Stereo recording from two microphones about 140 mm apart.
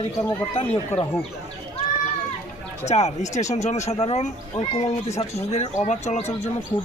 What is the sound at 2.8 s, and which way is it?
Speech, 50° left (ahead or behind).